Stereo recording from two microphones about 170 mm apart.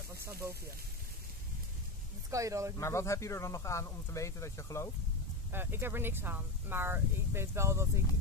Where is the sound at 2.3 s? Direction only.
20° right (ahead or behind).